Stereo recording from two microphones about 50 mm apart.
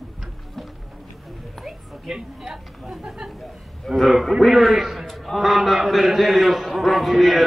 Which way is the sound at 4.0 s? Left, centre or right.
Centre.